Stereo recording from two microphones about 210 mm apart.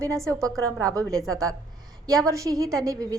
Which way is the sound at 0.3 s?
15° right (ahead or behind).